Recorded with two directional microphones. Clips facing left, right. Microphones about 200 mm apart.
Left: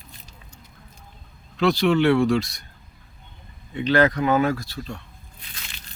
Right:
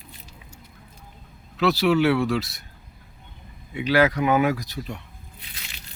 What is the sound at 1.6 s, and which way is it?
Speech, 5° right (ahead or behind).